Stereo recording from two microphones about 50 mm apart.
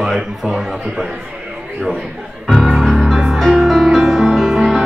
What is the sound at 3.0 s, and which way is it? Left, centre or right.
Music, centre.